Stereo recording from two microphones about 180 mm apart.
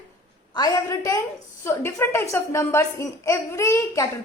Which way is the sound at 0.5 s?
20° left (ahead or behind).